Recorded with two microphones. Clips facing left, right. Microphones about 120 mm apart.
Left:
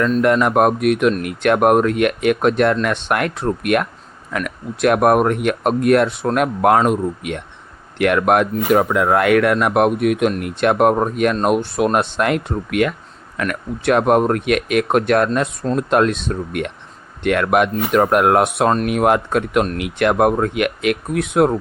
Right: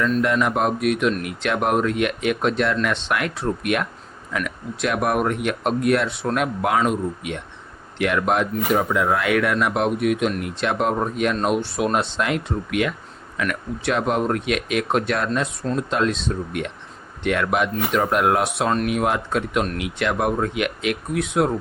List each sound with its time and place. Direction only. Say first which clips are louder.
0.0 s speech: left 5 dB; 50° left (ahead or behind)
15.3 s speech: left 4 dB; 40° left (ahead or behind)
15.7 s speech: left 6 dB; 55° left (ahead or behind)